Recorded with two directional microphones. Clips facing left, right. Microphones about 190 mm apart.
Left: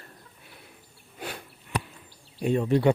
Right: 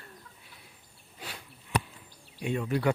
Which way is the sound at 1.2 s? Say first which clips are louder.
Left 7 dB; 55° left (ahead or behind).